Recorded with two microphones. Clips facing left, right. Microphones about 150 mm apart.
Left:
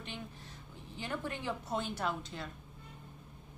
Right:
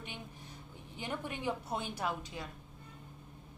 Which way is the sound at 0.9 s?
15° right (ahead or behind).